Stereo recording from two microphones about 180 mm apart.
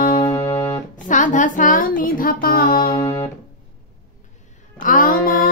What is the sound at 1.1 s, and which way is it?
Speech, 45° left (ahead or behind).